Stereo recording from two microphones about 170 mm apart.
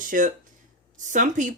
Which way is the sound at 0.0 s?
50° right (ahead or behind).